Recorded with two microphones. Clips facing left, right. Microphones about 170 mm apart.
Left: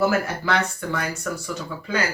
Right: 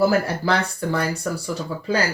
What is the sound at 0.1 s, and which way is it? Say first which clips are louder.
Speech: right 3 dB; 35° right (ahead or behind).